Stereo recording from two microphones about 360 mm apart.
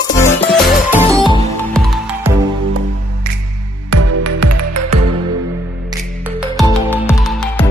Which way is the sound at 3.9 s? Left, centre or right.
Right.